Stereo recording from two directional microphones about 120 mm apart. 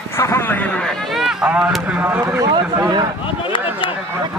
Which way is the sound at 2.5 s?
40° right (ahead or behind).